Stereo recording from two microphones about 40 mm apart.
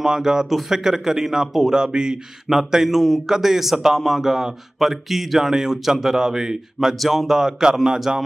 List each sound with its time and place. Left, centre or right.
0.0 s speech: centre
2.7 s a man's voice: centre